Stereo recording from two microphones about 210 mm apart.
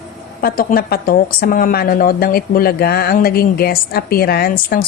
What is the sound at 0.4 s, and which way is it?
A woman's voice, 45° left (ahead or behind).